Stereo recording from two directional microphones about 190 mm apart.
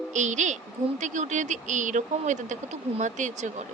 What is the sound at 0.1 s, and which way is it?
A woman's voice, 40° right (ahead or behind).